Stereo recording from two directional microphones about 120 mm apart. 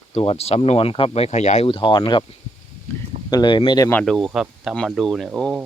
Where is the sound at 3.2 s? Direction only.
35° left (ahead or behind).